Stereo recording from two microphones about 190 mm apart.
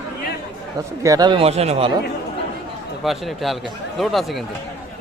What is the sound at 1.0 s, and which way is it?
Speech, 20° right (ahead or behind).